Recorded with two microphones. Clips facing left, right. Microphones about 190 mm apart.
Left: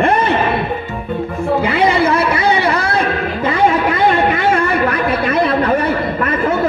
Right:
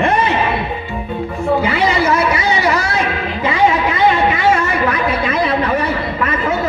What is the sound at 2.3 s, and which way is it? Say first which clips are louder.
A man's voice: left 1 dB; 55° left (ahead or behind).